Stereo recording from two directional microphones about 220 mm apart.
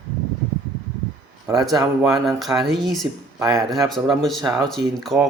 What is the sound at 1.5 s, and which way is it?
Speech, 15° right (ahead or behind).